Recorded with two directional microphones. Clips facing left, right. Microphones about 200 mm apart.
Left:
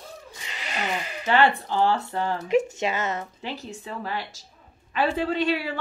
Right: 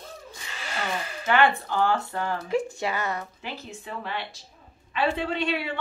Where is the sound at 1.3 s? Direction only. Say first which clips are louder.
Left 1 dB; 30° left (ahead or behind).